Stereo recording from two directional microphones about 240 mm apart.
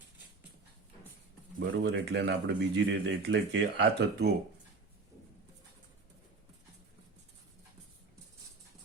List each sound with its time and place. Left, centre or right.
1.5 s speech: right